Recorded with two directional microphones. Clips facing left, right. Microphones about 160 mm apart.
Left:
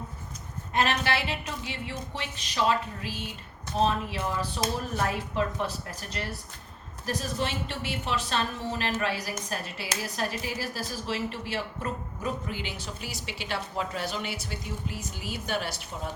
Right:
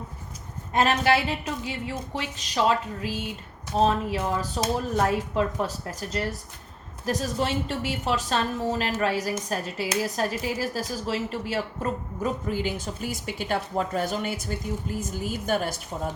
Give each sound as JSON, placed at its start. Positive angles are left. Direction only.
{"t": 0.7, "sound": "a woman's voice", "side_deg": -40}